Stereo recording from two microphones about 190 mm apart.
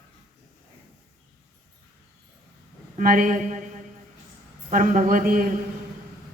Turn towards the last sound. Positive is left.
turn(degrees=-45)  # may be behind; listen again after turning